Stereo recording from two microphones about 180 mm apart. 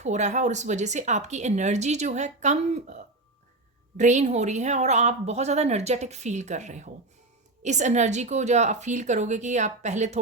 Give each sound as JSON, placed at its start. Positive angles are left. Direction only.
{"t": 0.0, "sound": "speech", "side_deg": -40}